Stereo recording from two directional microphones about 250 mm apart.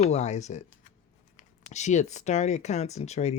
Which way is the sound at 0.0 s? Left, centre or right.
Left.